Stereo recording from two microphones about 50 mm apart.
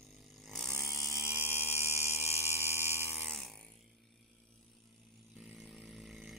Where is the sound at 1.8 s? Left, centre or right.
Right.